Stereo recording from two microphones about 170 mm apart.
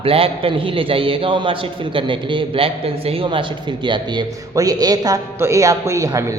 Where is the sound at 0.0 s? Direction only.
35° right (ahead or behind).